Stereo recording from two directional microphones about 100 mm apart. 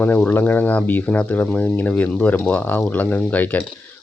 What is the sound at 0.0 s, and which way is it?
Speech, 20° left (ahead or behind).